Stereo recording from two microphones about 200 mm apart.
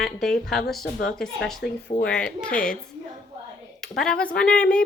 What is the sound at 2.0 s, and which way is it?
Speech, 5° left (ahead or behind).